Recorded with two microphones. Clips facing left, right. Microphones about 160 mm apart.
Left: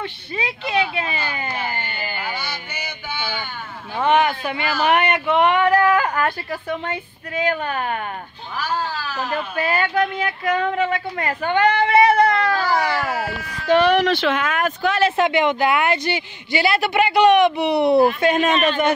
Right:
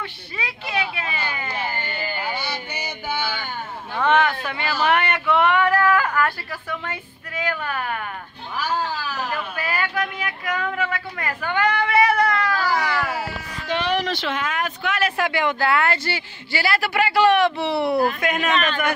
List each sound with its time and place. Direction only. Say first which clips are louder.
0.0 s speech: left 5 dB; 25° left (ahead or behind)
2.1 s a sound: right 1 dB; 30° right (ahead or behind)
3.9 s speech: left 2 dB; 15° left (ahead or behind)
8.5 s cat: even; 15° right (ahead or behind)
9.3 s speech: left 5 dB; 25° left (ahead or behind)
13.7 s speech: left 8 dB; 55° left (ahead or behind)
14.8 s speech: left 6 dB; 30° left (ahead or behind)